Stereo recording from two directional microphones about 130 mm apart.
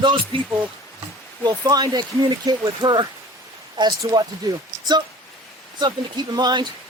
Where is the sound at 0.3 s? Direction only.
40° right (ahead or behind).